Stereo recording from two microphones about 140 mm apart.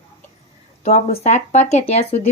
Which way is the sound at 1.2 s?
55° left (ahead or behind).